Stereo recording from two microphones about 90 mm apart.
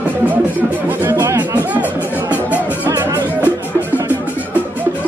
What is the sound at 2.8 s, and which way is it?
Music, 25° right (ahead or behind).